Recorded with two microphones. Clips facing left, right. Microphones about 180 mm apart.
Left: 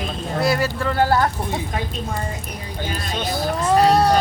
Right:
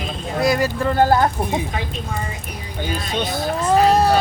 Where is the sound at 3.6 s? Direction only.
5° right (ahead or behind).